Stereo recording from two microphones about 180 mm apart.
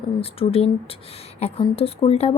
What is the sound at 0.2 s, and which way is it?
A woman's voice, 30° left (ahead or behind).